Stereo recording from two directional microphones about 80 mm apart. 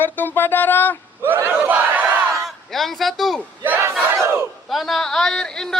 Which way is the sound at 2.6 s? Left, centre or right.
Centre.